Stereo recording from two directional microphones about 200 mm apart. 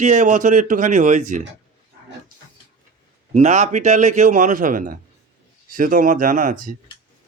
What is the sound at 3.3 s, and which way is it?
A man's voice, 35° right (ahead or behind).